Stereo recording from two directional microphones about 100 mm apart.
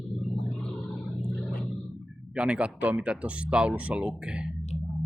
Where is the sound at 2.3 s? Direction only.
10° right (ahead or behind).